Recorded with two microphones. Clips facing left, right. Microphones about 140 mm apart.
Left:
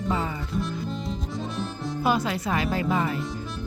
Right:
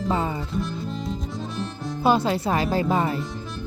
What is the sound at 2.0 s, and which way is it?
Speech, 30° right (ahead or behind).